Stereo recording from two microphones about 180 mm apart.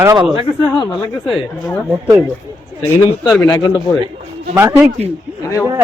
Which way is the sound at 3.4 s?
20° left (ahead or behind).